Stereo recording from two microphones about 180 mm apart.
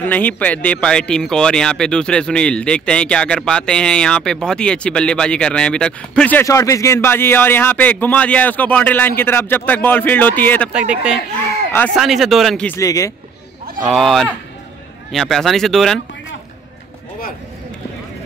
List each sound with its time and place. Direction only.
0.0 s speech: 10° left (ahead or behind)
10.7 s speech: 5° right (ahead or behind)
11.7 s speech: 5° left (ahead or behind)
12.7 s speech: 20° left (ahead or behind)
13.7 s speech: centre (ahead or behind)